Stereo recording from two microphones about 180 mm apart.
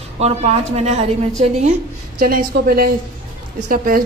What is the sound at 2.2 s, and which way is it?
A woman's voice, 50° right (ahead or behind).